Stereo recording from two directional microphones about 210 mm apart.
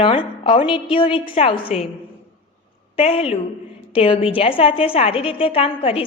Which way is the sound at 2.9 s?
30° left (ahead or behind).